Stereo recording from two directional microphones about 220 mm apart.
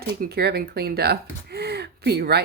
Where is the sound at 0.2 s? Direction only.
45° right (ahead or behind).